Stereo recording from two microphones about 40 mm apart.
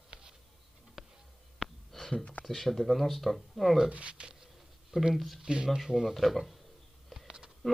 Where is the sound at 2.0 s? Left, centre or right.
Centre.